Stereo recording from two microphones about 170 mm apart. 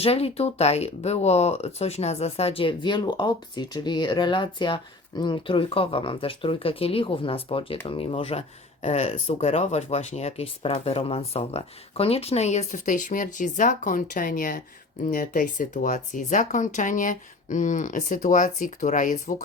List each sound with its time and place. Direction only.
0.0 s speech: 35° left (ahead or behind)